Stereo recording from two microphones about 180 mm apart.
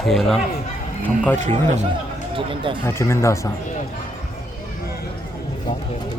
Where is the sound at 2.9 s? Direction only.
15° left (ahead or behind).